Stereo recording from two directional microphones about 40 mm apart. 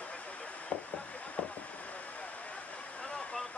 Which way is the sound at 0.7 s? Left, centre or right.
Left.